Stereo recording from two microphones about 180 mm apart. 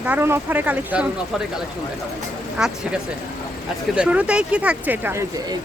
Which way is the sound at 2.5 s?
5° right (ahead or behind).